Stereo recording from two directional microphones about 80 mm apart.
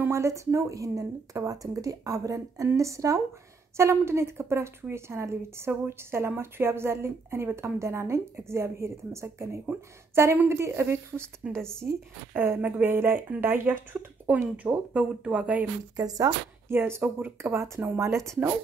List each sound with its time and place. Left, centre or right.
0.1 s speech: right
11.4 s speech: centre
11.8 s speech: right; by 15.6 s centre
16.0 s speech: right
16.6 s speech: right